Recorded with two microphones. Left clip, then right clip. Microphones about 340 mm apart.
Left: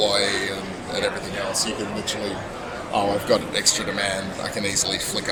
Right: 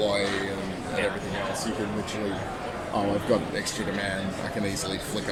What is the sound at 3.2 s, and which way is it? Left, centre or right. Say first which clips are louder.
Speech: left 6 dB; left.